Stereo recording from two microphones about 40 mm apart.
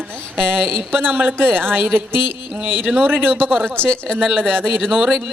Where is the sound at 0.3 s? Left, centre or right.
Right.